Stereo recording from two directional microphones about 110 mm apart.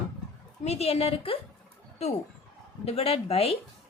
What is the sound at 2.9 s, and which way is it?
Speech, 65° left (ahead or behind).